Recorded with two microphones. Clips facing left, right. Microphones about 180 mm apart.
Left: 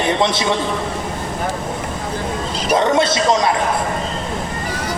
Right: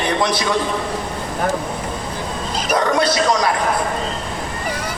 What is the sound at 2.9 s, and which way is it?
Speech, 25° left (ahead or behind).